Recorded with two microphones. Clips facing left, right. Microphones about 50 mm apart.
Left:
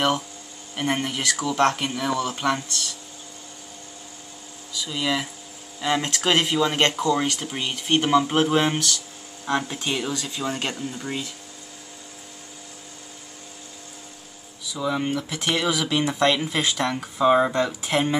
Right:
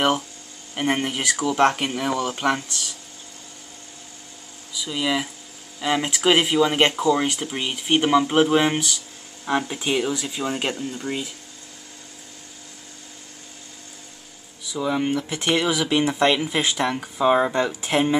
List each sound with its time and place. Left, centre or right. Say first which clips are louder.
0.7 s speech: right 2 dB; centre
4.7 s speech: right 1 dB; centre
14.7 s speech: right 2 dB; centre